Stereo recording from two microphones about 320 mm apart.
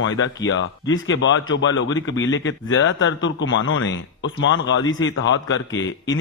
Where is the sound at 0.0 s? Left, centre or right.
Left.